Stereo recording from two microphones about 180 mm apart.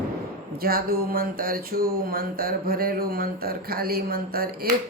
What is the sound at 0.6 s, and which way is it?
Speech, 55° right (ahead or behind).